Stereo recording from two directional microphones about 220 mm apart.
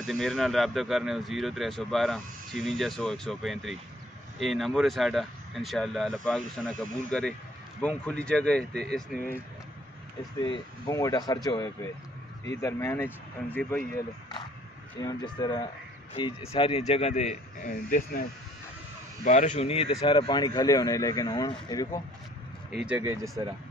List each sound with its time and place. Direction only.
0.0 s speech: centre (ahead or behind)
10.4 s speech: 20° left (ahead or behind)
15.0 s speech: 20° left (ahead or behind); by 18.2 s 40° left (ahead or behind)
19.2 s speech: 35° left (ahead or behind); by 22.0 s 20° left (ahead or behind)
22.7 s speech: 5° right (ahead or behind)